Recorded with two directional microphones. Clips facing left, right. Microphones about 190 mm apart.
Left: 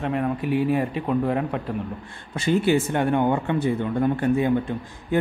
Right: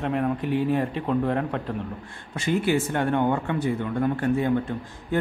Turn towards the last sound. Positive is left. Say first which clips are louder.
# left 3 dB
turn(degrees=15)  # may be behind; listen again after turning